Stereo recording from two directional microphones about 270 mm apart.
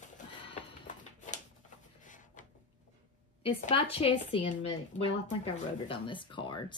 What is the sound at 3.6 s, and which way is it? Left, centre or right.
A woman's voice, left.